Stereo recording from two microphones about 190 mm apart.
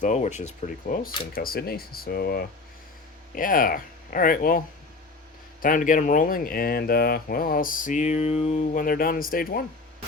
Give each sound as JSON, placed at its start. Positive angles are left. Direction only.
{"t": 0.0, "sound": "speech", "side_deg": 40}
{"t": 5.6, "sound": "speech", "side_deg": 45}